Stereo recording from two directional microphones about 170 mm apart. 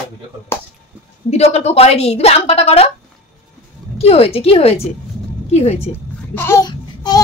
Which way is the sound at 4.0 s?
35° left (ahead or behind).